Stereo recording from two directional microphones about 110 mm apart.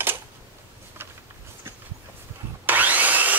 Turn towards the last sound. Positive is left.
turn(degrees=-15)  # may be behind; listen again after turning